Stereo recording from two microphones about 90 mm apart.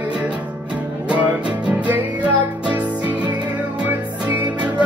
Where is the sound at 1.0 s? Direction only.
15° right (ahead or behind).